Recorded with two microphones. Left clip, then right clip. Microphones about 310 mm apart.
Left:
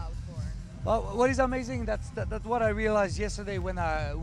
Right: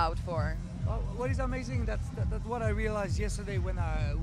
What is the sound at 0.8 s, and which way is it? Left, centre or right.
A man's voice, left.